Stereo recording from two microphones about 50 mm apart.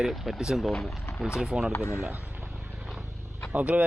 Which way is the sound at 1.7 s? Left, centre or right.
Left.